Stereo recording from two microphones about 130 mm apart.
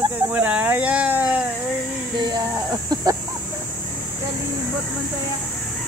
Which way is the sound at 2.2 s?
35° right (ahead or behind).